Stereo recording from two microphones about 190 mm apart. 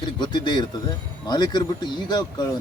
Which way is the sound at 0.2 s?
25° left (ahead or behind).